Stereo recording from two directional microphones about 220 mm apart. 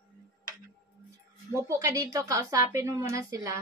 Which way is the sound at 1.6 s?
15° right (ahead or behind).